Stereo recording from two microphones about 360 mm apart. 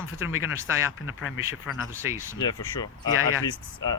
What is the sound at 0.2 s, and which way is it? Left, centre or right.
Speech, left.